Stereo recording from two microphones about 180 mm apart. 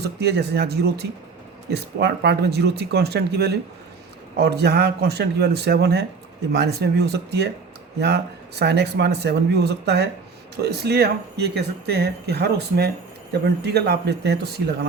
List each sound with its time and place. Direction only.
0.0 s speech: 65° right (ahead or behind)